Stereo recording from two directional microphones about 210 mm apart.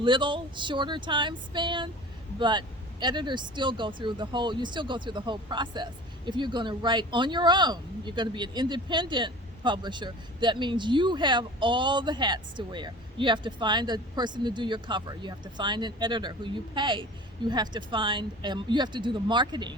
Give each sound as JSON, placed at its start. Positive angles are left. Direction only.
{"t": 0.0, "sound": "speech", "side_deg": -25}